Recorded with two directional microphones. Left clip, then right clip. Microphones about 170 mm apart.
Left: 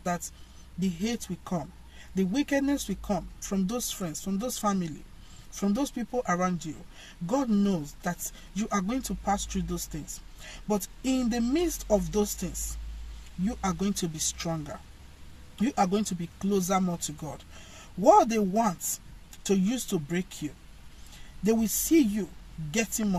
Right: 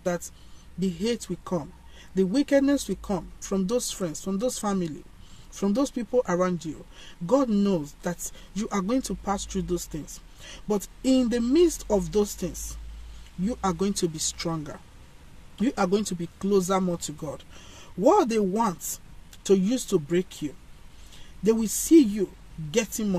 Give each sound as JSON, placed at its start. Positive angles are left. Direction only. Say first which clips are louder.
{"t": 0.7, "sound": "speech", "louder": "right 5 dB", "side_deg": -15}
{"t": 13.5, "sound": "speech", "louder": "right 4 dB", "side_deg": -15}
{"t": 21.5, "sound": "speech", "louder": "right 4 dB", "side_deg": -15}